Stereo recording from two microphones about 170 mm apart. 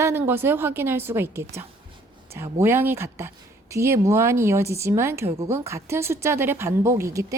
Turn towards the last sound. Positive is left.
turn(degrees=-20)  # may be behind; listen again after turning